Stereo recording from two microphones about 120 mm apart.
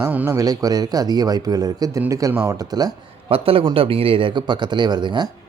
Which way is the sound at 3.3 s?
50° right (ahead or behind).